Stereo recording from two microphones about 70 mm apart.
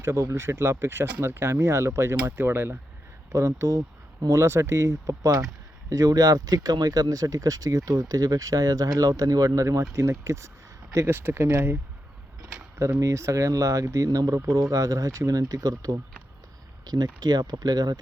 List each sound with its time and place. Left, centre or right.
0.0 s speech: right
3.3 s speech: right
9.6 s speech: right
12.8 s speech: right
16.8 s speech: right